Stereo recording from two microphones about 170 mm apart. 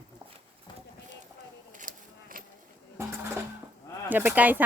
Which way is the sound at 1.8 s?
55° right (ahead or behind).